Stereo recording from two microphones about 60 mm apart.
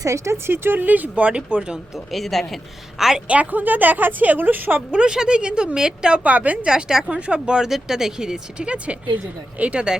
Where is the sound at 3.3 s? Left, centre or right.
Right.